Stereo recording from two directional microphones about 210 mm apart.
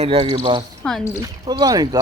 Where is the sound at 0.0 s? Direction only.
30° right (ahead or behind).